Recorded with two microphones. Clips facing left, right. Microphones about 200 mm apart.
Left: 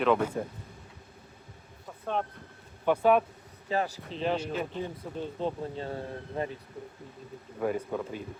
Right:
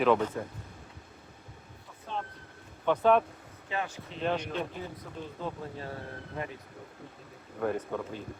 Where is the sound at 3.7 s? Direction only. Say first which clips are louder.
Left 5 dB; 35° left (ahead or behind).